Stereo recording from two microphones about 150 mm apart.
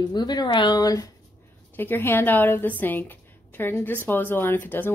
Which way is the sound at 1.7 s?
15° left (ahead or behind).